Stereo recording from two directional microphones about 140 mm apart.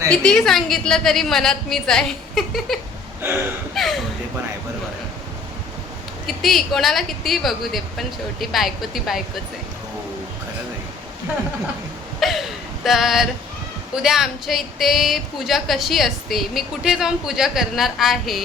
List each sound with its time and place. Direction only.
0.1 s a woman's voice: 5° left (ahead or behind)
3.2 s gasp: 15° right (ahead or behind)
3.8 s speech: centre (ahead or behind)
6.2 s a woman's voice: centre (ahead or behind)
12.2 s a sound: centre (ahead or behind)
13.9 s a woman's voice: 5° right (ahead or behind)